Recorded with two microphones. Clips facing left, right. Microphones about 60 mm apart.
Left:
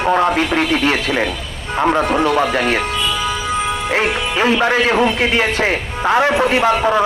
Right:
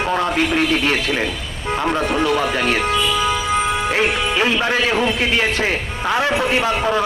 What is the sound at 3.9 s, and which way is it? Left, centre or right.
Speech, left.